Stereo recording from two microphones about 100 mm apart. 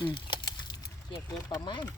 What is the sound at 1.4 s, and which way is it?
Speech, 50° left (ahead or behind).